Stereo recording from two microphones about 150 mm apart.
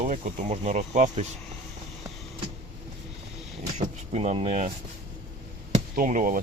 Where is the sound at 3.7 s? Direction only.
45° right (ahead or behind).